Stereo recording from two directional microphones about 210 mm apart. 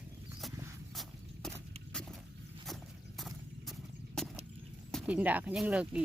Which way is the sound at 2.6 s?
Centre (ahead or behind).